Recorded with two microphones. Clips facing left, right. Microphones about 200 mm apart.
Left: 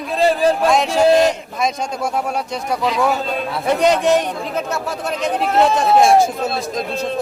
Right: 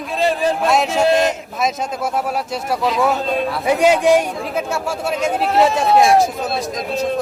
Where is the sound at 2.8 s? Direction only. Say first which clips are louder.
Right 1 dB; centre (ahead or behind).